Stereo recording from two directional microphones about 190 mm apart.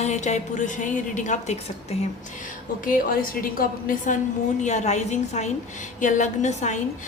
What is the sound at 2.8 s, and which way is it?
A woman's voice, 50° left (ahead or behind).